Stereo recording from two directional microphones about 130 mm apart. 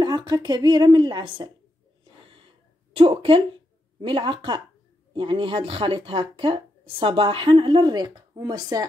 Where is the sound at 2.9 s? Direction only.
45° right (ahead or behind).